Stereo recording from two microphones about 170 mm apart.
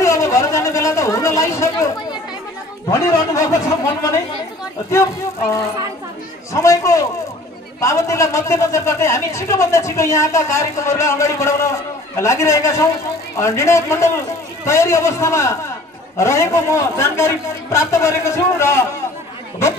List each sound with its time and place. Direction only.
0.0 s a sound: 20° left (ahead or behind)
2.9 s a man's voice: 20° left (ahead or behind)
6.5 s a man's voice: 20° left (ahead or behind)